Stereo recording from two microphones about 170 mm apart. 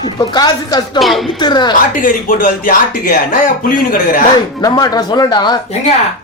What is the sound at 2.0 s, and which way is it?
Speech, 55° left (ahead or behind).